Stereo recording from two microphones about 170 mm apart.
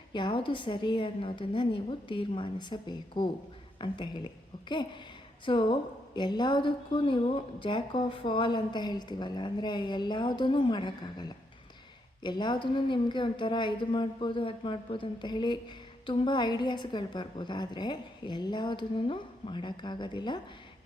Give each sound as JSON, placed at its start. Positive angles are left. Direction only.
{"t": 0.1, "sound": "speech", "side_deg": 30}
{"t": 5.5, "sound": "speech", "side_deg": 30}